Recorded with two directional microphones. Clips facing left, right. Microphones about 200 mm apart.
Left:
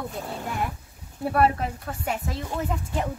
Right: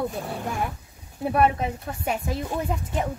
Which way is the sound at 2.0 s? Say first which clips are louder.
Right 3 dB; 25° right (ahead or behind).